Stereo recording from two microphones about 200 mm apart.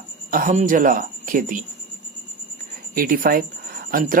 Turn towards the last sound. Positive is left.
turn(degrees=-45)  # may be behind; listen again after turning